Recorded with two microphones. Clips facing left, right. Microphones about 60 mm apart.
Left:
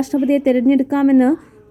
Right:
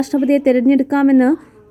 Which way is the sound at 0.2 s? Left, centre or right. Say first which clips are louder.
Right 2 dB; right.